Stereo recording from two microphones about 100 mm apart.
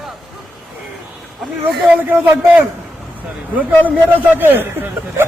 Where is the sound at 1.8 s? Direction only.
15° right (ahead or behind).